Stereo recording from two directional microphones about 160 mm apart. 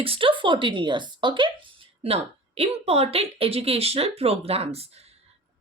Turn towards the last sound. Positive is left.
turn(degrees=-40)  # may be behind; listen again after turning